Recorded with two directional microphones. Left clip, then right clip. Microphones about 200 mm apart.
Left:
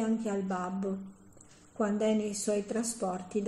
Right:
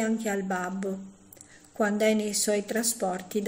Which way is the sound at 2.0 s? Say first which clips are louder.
Right 5 dB; 45° right (ahead or behind).